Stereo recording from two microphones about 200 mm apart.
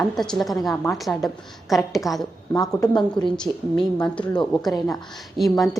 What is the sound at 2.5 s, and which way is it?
Speech, 20° left (ahead or behind).